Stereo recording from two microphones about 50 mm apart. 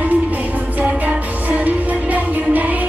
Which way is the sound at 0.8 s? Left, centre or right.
Right.